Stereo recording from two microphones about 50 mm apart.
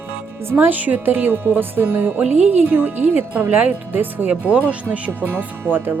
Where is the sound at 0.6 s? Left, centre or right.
Right.